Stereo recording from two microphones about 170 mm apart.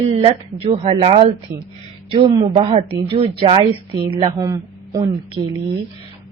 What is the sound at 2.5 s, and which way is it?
Speech, 35° right (ahead or behind).